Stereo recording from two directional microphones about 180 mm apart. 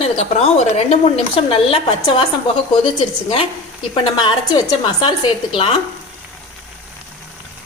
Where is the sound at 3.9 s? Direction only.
25° left (ahead or behind).